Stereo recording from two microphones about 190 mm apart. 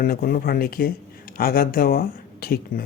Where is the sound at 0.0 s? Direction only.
50° left (ahead or behind).